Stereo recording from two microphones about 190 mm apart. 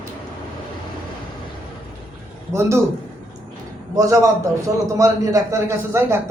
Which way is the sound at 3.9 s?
15° right (ahead or behind).